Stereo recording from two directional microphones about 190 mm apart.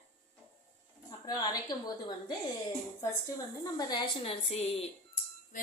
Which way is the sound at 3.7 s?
20° left (ahead or behind).